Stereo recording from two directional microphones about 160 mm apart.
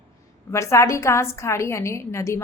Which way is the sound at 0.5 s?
20° left (ahead or behind).